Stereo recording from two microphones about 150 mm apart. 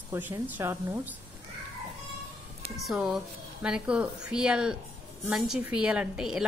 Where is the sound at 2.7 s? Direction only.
Centre (ahead or behind).